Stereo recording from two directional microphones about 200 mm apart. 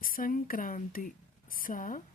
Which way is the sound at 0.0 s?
45° left (ahead or behind).